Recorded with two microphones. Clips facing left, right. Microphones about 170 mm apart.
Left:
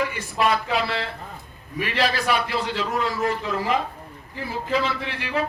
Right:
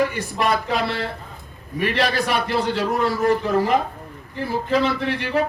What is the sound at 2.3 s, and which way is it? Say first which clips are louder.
A man's voice: right 3 dB; 40° right (ahead or behind).